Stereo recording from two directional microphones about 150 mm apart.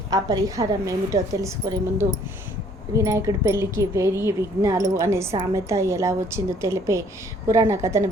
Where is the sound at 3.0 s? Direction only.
20° right (ahead or behind).